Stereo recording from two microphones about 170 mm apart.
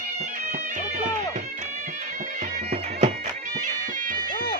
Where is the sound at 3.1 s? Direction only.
50° right (ahead or behind).